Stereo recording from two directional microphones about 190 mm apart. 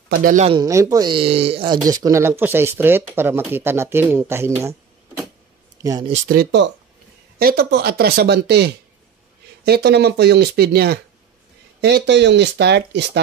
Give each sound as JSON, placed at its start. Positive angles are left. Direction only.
{"t": 0.1, "sound": "speech", "side_deg": -45}
{"t": 0.5, "sound": "speech", "side_deg": -20}
{"t": 1.9, "sound": "speech", "side_deg": -15}
{"t": 5.8, "sound": "speech", "side_deg": -20}
{"t": 6.2, "sound": "speech", "side_deg": -55}